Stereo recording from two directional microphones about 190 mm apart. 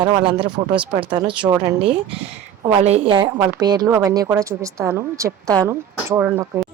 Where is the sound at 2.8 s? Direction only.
35° right (ahead or behind); by 6.6 s 15° right (ahead or behind).